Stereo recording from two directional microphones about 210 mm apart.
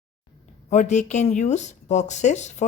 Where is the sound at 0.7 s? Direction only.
35° left (ahead or behind).